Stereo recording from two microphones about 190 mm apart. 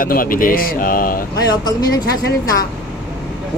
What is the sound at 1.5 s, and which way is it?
Speech, 20° left (ahead or behind).